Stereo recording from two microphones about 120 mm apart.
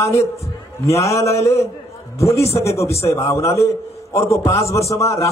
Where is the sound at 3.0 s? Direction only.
25° left (ahead or behind).